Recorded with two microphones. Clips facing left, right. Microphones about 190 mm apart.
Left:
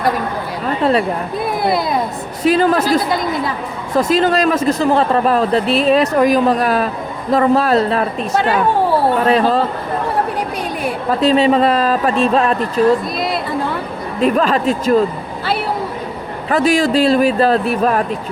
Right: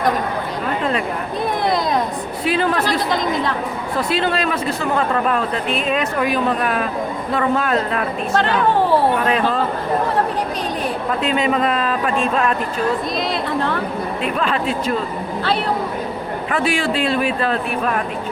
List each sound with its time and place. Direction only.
1.6 s speech: 5° left (ahead or behind)
2.4 s a woman's voice: 40° left (ahead or behind)
9.2 s speech: 35° left (ahead or behind)
11.2 s speech: 35° left (ahead or behind)
14.2 s speech: 40° left (ahead or behind)
16.5 s speech: 40° left (ahead or behind)